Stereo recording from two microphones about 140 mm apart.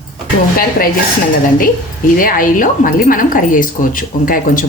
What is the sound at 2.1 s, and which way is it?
Speech, 80° left.